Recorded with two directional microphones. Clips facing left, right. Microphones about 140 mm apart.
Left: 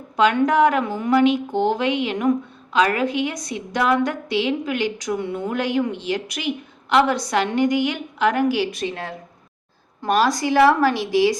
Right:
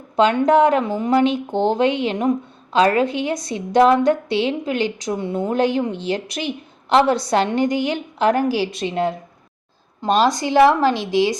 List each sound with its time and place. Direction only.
0.2 s a woman's voice: 30° right (ahead or behind)